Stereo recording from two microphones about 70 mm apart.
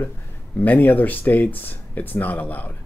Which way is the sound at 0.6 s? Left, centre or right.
Left.